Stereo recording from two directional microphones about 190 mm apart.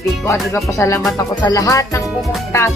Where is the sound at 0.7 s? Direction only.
15° left (ahead or behind).